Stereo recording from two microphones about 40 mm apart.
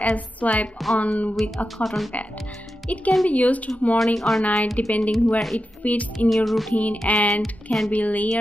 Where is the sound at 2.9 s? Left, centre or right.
Left.